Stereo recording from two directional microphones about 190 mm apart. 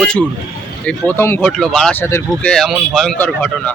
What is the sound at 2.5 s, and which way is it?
Speech, centre (ahead or behind).